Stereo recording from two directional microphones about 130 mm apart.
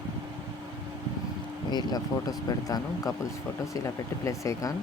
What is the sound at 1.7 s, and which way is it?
Speech, 30° left (ahead or behind).